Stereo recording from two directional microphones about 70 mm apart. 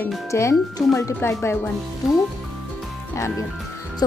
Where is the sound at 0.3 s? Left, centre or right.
Left.